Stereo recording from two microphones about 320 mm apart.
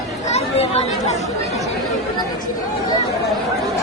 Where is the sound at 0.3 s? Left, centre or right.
Centre.